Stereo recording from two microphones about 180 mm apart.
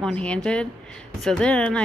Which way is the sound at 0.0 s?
5° left (ahead or behind).